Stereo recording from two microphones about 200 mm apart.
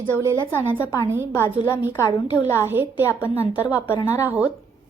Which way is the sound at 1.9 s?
15° left (ahead or behind).